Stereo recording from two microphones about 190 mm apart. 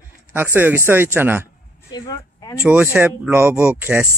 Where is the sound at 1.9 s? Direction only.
20° left (ahead or behind).